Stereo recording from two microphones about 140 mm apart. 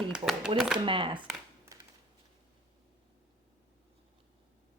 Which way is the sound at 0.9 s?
35° right (ahead or behind).